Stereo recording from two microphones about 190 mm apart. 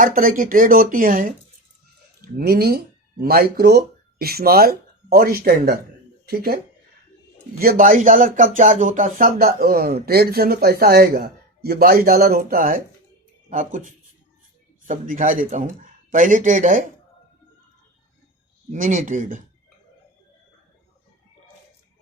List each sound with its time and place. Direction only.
0.0 s speech: 50° right (ahead or behind)
7.6 s speech: 50° right (ahead or behind)
18.7 s speech: 40° right (ahead or behind)